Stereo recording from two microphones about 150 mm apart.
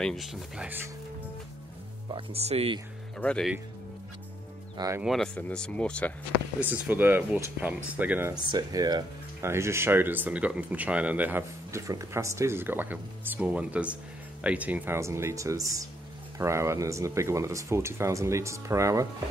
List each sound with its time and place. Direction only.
0.0 s speech: centre (ahead or behind)
2.0 s speech: 40° right (ahead or behind)
3.2 s speech: 5° left (ahead or behind)
4.7 s speech: 20° right (ahead or behind)
5.0 s speech: centre (ahead or behind)
6.6 s speech: 10° right (ahead or behind)
8.4 s speech: 30° right (ahead or behind)